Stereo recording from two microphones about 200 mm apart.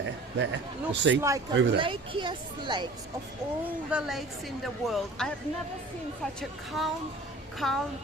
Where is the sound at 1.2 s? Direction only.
15° right (ahead or behind).